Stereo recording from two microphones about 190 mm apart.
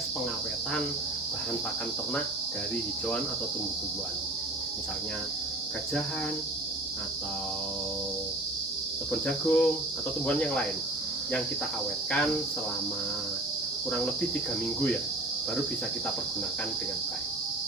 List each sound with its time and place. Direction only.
9.2 s cricket: 5° left (ahead or behind)